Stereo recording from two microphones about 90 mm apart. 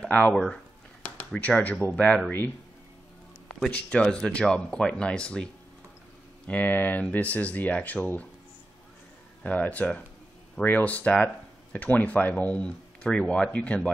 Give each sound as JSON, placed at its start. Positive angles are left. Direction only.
{"t": 0.0, "sound": "speech", "side_deg": 15}
{"t": 3.5, "sound": "speech", "side_deg": 10}
{"t": 9.4, "sound": "speech", "side_deg": 20}